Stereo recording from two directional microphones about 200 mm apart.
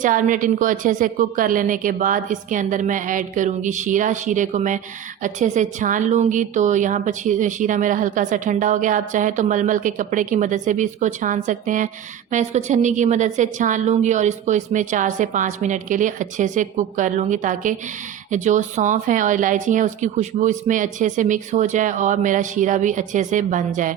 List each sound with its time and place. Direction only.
0.0 s a woman's voice: 40° right (ahead or behind)